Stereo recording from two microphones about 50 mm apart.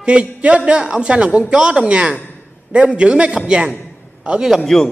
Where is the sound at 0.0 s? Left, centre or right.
Right.